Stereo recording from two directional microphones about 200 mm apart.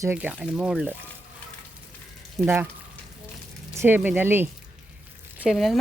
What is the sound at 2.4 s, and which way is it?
Speech, 10° right (ahead or behind).